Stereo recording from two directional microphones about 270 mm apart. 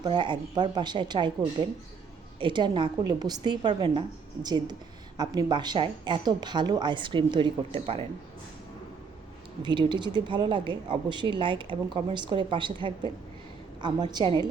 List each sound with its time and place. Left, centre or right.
0.0 s speech: centre
2.4 s speech: centre
9.6 s speech: centre